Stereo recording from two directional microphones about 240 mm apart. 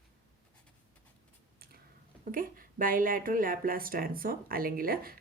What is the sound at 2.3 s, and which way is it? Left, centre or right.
Speech, right.